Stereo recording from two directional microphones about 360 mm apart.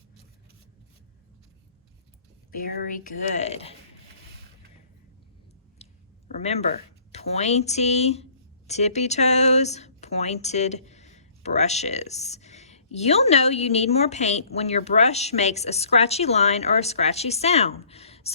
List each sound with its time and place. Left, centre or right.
2.5 s speech: left
5.8 s a sound: centre
6.3 s speech: centre